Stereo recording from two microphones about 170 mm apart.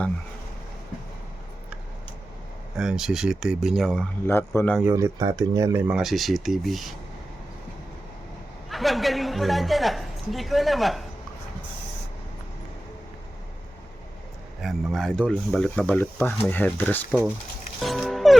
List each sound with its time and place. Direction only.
2.7 s speech: 5° right (ahead or behind)
4.3 s speech: 15° left (ahead or behind)
4.8 s speech: 15° right (ahead or behind)
5.9 s speech: centre (ahead or behind)
8.7 s a woman's voice: centre (ahead or behind)
14.6 s speech: centre (ahead or behind)
17.7 s music: centre (ahead or behind)